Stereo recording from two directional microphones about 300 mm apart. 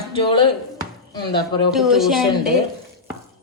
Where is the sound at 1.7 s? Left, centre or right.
Centre.